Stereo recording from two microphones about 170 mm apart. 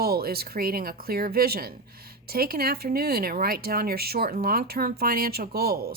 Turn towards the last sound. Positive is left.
turn(degrees=-65)  # may be behind; listen again after turning